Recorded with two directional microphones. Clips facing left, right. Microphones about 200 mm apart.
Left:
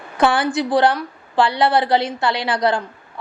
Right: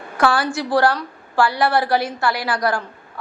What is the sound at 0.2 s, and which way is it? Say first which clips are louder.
A woman's voice: left 2 dB; 20° left (ahead or behind).